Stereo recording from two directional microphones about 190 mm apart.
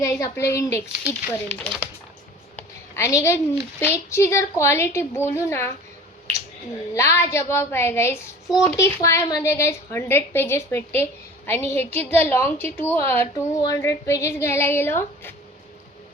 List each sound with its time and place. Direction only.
0.2 s a woman's voice: 15° left (ahead or behind)
1.3 s a woman's voice: 5° left (ahead or behind)
6.9 s a woman's voice: 15° left (ahead or behind)
8.4 s speech: centre (ahead or behind)
8.7 s a woman's voice: 15° left (ahead or behind)